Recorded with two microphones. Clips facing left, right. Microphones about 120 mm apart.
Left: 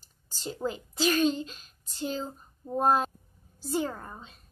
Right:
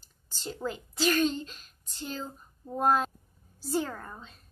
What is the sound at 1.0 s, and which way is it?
Speech, 5° left (ahead or behind).